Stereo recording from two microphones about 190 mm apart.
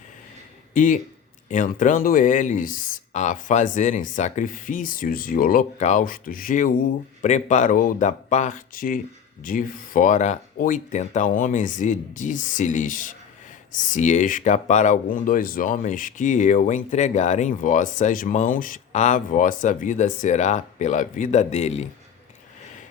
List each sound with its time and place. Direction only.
0.7 s speech: 45° left (ahead or behind)